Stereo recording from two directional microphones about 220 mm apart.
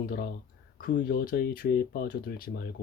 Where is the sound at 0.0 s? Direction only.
40° left (ahead or behind).